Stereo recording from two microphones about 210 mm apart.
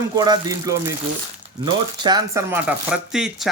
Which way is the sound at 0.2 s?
15° right (ahead or behind).